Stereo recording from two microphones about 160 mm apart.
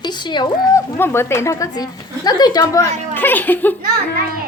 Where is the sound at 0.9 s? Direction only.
15° left (ahead or behind).